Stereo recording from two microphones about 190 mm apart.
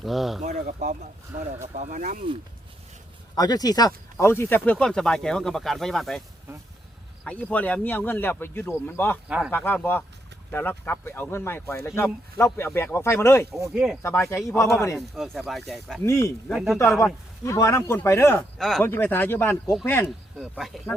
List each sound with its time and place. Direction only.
0.0 s speech: centre (ahead or behind)
0.4 s speech: 45° right (ahead or behind)
3.3 s speech: 20° left (ahead or behind); by 6.2 s centre (ahead or behind)
7.3 s speech: 10° left (ahead or behind)
13.7 s speech: 5° right (ahead or behind)
14.0 s speech: 10° left (ahead or behind)
14.9 s speech: centre (ahead or behind)
16.0 s speech: 15° left (ahead or behind)
16.5 s speech: centre (ahead or behind)
16.7 s speech: 15° left (ahead or behind)
20.1 s speech: centre (ahead or behind)